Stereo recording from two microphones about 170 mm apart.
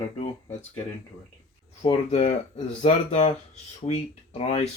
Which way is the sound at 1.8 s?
40° left (ahead or behind).